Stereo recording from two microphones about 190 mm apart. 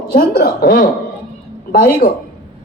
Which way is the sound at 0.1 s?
45° left (ahead or behind).